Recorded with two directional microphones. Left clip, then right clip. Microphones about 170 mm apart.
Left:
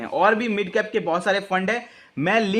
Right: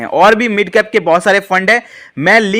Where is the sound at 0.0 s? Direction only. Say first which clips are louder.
Right 11 dB; 35° right (ahead or behind).